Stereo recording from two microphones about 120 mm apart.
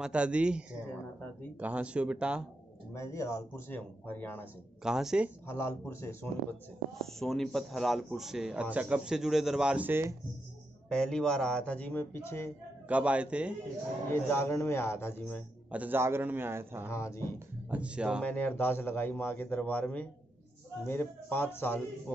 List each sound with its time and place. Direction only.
0.0 s a man's voice: 10° right (ahead or behind)
2.9 s speech: 25° left (ahead or behind)
4.8 s speech: 5° right (ahead or behind)
5.5 s speech: 20° left (ahead or behind)
7.0 s speech: centre (ahead or behind); by 10.1 s 20° right (ahead or behind)
10.9 s speech: 5° left (ahead or behind)
12.8 s a man's voice: 10° right (ahead or behind)
14.1 s speech: 20° left (ahead or behind)
15.7 s a man's voice: 15° right (ahead or behind)
16.8 s speech: 25° left (ahead or behind)
17.6 s a man's voice: 10° right (ahead or behind)
18.2 s speech: 15° left (ahead or behind)